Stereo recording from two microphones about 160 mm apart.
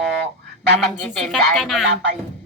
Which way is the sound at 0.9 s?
Centre (ahead or behind).